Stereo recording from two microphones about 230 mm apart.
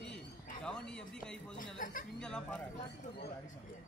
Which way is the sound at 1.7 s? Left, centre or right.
Left.